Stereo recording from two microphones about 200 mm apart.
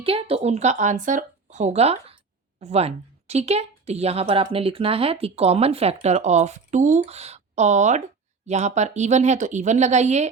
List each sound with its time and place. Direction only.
0.0 s speech: 30° right (ahead or behind)